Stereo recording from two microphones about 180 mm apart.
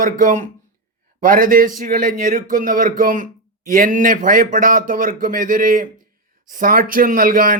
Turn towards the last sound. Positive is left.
turn(degrees=-50)  # may be behind; listen again after turning